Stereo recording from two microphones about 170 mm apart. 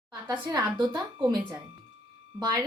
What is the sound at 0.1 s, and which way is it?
A woman's voice, 25° right (ahead or behind).